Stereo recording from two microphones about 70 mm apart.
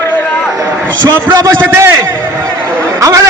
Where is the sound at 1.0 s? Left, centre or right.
Right.